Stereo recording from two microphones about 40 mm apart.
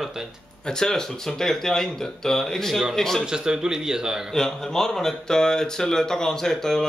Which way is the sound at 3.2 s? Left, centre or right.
Centre.